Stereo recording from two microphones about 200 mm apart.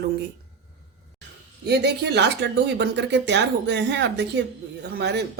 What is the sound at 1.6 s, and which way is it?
A woman's voice, 55° right (ahead or behind).